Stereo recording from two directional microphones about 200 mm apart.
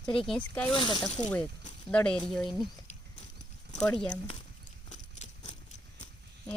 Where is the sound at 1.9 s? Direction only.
5° left (ahead or behind).